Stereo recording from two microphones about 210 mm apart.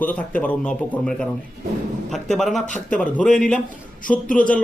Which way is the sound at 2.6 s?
35° left (ahead or behind).